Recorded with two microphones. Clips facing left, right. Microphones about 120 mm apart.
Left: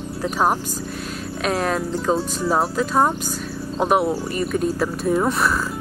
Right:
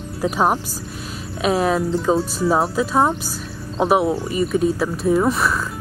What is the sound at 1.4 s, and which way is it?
Speech, 5° right (ahead or behind).